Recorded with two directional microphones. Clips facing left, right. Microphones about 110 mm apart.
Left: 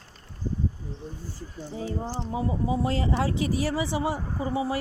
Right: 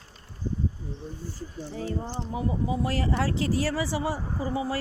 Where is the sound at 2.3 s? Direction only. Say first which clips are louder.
Left 1 dB; 25° left (ahead or behind).